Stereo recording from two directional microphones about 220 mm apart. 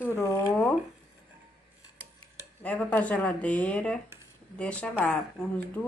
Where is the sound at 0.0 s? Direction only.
10° left (ahead or behind).